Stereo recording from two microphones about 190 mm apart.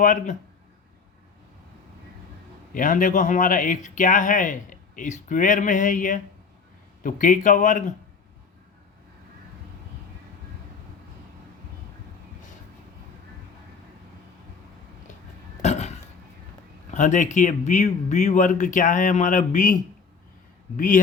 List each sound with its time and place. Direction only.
0.0 s speech: 45° left (ahead or behind)
2.7 s speech: 45° left (ahead or behind)
15.6 s a sound: 35° left (ahead or behind)
16.9 s speech: 40° left (ahead or behind)